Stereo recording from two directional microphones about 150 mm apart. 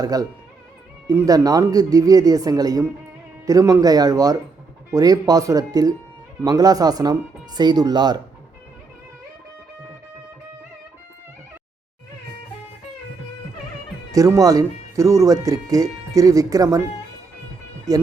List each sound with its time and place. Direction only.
0.0 s speech: 25° right (ahead or behind)
14.1 s speech: 20° right (ahead or behind)